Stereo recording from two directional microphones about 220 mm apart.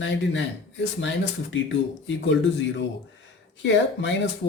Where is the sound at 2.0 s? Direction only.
55° left (ahead or behind).